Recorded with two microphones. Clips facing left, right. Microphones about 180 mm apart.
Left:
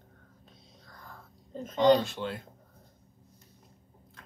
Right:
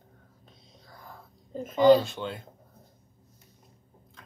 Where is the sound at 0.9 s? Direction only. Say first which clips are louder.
Right 3 dB; 10° right (ahead or behind).